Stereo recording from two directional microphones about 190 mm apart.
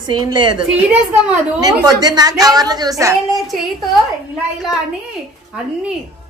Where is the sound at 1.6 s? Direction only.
20° right (ahead or behind).